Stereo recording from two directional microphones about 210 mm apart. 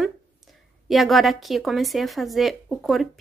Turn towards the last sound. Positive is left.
turn(degrees=0)  # may be behind; listen again after turning